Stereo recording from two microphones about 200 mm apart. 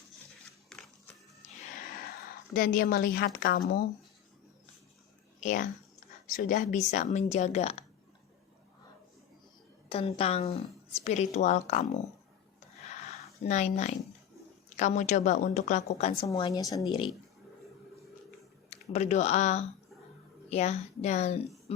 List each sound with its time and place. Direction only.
0.7 s music: 5° left (ahead or behind)
2.5 s a woman's voice: 45° left (ahead or behind)
5.4 s a woman's voice: 35° left (ahead or behind)
9.9 s a woman's voice: 30° left (ahead or behind)
12.9 s a sound: 30° left (ahead or behind)
13.4 s a woman's voice: 35° left (ahead or behind)
16.5 s speech: 20° left (ahead or behind)
18.9 s a woman's voice: 35° left (ahead or behind)